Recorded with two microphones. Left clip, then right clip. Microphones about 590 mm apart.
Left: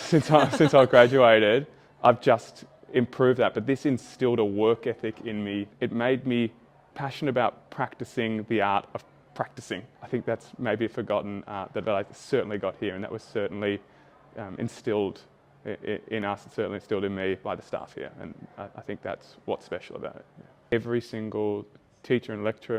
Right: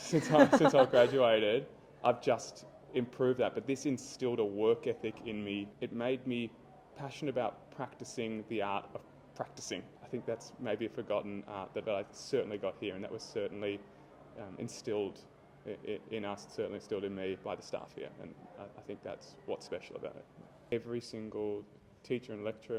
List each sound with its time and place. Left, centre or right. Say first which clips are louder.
0.3 s speech: left 3 dB; right
0.7 s speech: left 9 dB; left